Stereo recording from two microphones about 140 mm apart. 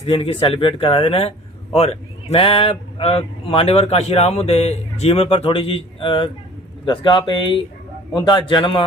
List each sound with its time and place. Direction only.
0.0 s speech: 45° left (ahead or behind)